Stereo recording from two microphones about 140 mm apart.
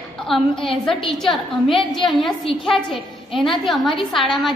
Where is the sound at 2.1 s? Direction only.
Centre (ahead or behind).